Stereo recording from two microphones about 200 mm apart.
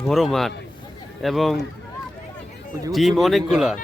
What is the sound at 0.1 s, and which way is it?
Speech, centre (ahead or behind).